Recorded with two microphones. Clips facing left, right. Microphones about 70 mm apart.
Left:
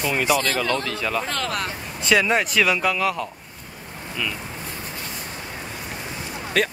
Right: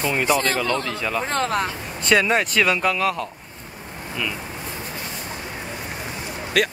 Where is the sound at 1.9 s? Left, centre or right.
Centre.